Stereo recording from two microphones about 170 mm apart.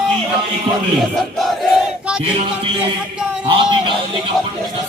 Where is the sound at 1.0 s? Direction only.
Centre (ahead or behind).